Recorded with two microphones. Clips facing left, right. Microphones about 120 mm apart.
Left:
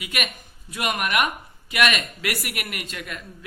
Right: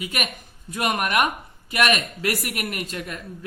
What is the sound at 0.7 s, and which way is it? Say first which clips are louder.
Speech: right 2 dB; 40° right (ahead or behind).